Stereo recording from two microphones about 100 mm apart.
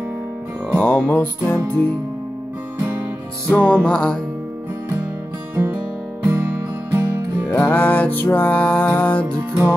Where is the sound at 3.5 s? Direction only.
10° left (ahead or behind).